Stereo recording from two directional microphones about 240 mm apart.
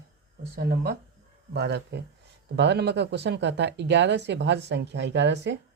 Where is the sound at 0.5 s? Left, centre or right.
Right.